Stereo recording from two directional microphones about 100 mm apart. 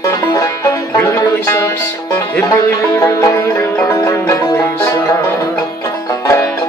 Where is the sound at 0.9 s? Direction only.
25° left (ahead or behind).